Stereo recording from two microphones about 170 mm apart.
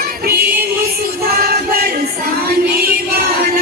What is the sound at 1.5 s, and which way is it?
Music, 65° right (ahead or behind).